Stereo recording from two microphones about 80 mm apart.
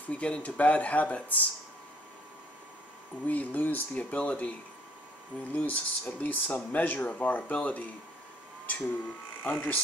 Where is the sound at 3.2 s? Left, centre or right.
Left.